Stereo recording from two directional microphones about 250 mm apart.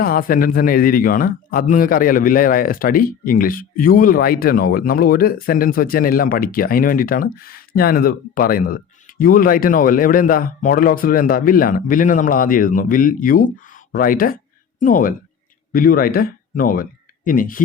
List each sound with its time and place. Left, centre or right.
0.0 s a man's voice: left